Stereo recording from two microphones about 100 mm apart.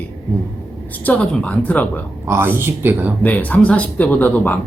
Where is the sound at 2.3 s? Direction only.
25° right (ahead or behind).